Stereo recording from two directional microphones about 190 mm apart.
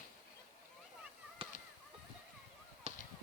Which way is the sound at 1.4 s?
30° right (ahead or behind).